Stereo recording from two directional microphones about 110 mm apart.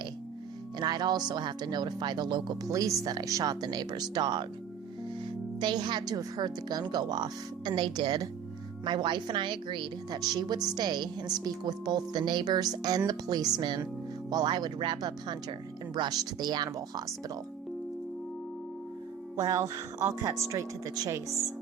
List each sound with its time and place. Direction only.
0.8 s a woman's voice: 40° right (ahead or behind)
2.7 s a woman's voice: 35° right (ahead or behind)
19.4 s a woman's voice: 30° right (ahead or behind)